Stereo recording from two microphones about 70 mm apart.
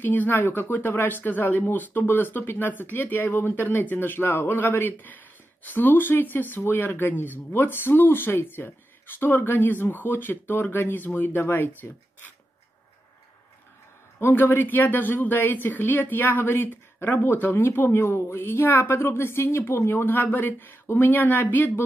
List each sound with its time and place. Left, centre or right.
0.0 s a woman's voice: left
14.2 s a woman's voice: left